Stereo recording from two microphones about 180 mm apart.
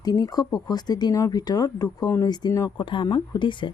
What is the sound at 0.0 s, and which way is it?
Speech, 20° left (ahead or behind).